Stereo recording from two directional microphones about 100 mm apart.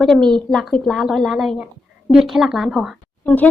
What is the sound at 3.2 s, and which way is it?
Speech, 15° left (ahead or behind).